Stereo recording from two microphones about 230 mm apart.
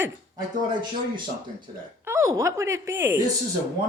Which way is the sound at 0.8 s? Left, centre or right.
Centre.